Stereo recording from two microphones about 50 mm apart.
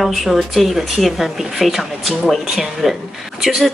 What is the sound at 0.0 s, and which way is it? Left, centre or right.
Speech, centre.